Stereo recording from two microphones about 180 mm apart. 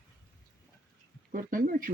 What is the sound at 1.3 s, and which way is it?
Speech, 50° right (ahead or behind).